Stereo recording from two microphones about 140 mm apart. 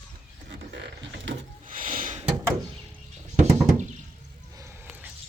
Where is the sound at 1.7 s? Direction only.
75° right (ahead or behind).